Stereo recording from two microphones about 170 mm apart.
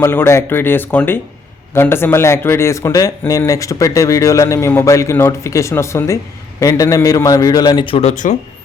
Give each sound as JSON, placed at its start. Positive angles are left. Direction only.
{"t": 0.0, "sound": "a man's voice", "side_deg": 15}